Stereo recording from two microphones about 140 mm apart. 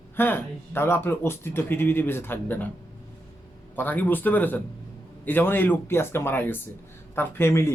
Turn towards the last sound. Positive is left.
turn(degrees=20)  # may be behind; listen again after turning